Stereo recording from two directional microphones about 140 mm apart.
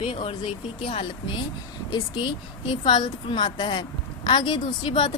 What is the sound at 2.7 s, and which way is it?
A woman's voice, 35° left (ahead or behind).